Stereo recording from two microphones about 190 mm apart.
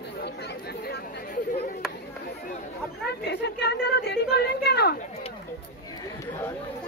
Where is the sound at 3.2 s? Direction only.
60° left (ahead or behind).